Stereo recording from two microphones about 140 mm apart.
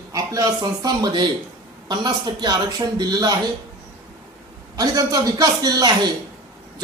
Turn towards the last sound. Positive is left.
turn(degrees=-30)  # may be behind; listen again after turning